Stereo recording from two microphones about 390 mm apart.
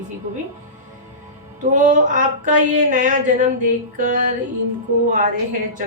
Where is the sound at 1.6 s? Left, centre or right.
Centre.